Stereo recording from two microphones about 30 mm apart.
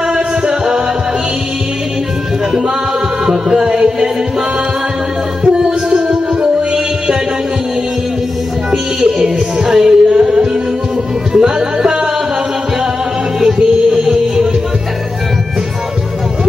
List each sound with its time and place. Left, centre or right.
0.1 s music: right
3.3 s music: right
5.4 s music: centre
9.0 s music: right
14.0 s music: centre